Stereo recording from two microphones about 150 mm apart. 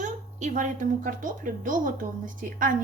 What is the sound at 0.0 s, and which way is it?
A woman's voice, 55° right (ahead or behind).